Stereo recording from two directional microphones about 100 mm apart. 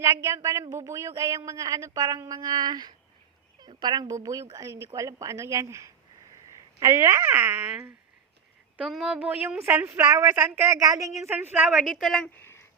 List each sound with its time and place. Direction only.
0.0 s speech: 30° right (ahead or behind)
8.8 s a woman's voice: 5° right (ahead or behind)
9.1 s speech: 15° right (ahead or behind)
10.7 s speech: 35° right (ahead or behind)
11.5 s a woman's voice: 10° right (ahead or behind)
12.3 s a sound: 25° left (ahead or behind)